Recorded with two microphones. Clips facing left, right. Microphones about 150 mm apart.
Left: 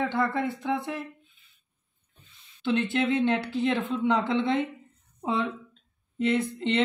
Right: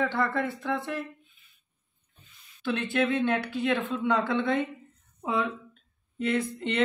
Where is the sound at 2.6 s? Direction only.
20° left (ahead or behind).